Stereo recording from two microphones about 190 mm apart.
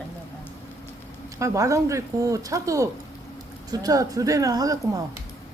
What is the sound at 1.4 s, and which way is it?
Speech, 15° right (ahead or behind).